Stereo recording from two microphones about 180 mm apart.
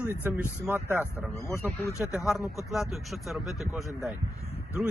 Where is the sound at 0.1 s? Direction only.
10° right (ahead or behind).